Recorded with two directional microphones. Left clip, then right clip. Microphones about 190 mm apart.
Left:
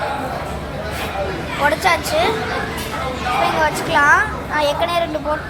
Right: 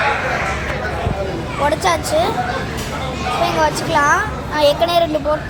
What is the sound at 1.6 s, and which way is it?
Speech, 10° right (ahead or behind).